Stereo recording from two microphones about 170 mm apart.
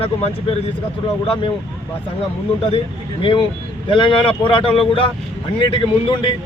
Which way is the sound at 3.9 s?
30° left (ahead or behind).